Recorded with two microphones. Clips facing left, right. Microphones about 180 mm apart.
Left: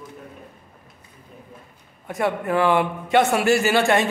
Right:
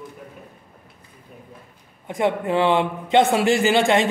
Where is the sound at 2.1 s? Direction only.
20° right (ahead or behind).